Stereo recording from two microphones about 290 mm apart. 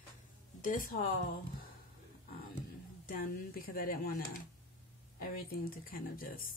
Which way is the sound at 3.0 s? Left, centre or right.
Left.